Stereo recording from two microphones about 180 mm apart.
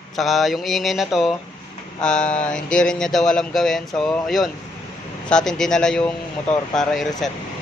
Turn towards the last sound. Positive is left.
turn(degrees=0)  # may be behind; listen again after turning